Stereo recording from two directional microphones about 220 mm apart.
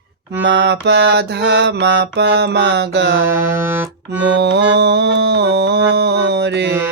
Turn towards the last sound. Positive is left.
turn(degrees=-50)  # may be behind; listen again after turning